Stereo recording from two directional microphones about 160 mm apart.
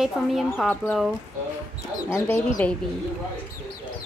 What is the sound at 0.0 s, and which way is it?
Speech, centre (ahead or behind).